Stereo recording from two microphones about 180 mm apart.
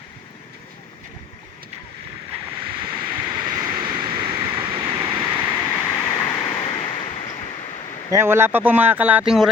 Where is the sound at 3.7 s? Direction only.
25° right (ahead or behind).